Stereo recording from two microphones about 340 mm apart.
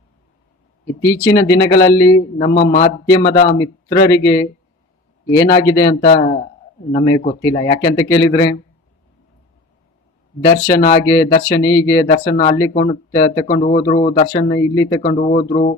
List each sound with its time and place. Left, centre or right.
1.0 s speech: centre
3.3 s speech: left
3.6 s speech: centre
10.4 s speech: centre
15.1 s speech: left